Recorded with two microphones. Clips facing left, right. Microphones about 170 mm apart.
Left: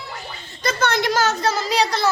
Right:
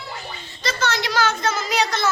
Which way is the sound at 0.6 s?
55° left (ahead or behind).